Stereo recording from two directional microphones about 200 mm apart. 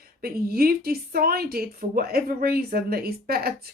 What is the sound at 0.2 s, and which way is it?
Speech, 50° right (ahead or behind).